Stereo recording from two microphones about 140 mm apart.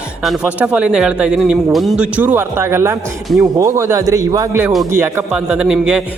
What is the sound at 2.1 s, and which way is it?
Speech, 15° right (ahead or behind).